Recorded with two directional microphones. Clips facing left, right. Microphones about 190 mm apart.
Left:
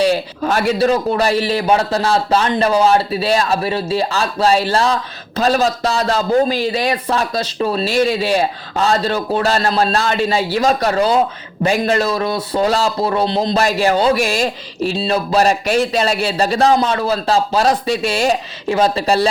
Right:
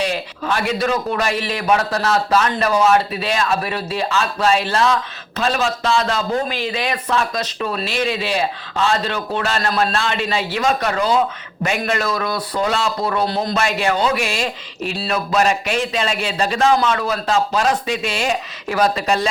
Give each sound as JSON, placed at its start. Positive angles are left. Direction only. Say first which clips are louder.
{"t": 0.0, "sound": "a man's voice", "louder": "left 7 dB", "side_deg": 40}
{"t": 14.9, "sound": "a man's voice", "louder": "left 3 dB", "side_deg": 25}